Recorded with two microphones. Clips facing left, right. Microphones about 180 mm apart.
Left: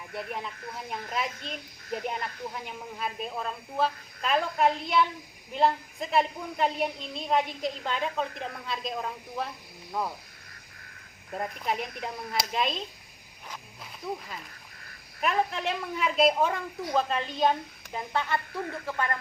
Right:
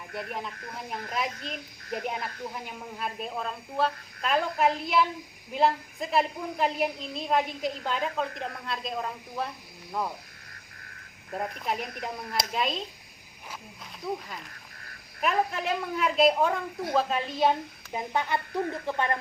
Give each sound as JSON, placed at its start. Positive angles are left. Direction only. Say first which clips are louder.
{"t": 0.1, "sound": "a woman's voice", "louder": "even", "side_deg": 0}
{"t": 11.3, "sound": "a woman's voice", "louder": "even", "side_deg": 0}
{"t": 14.0, "sound": "a woman's voice", "louder": "right 2 dB", "side_deg": 0}
{"t": 15.2, "sound": "a woman's voice", "louder": "even", "side_deg": 0}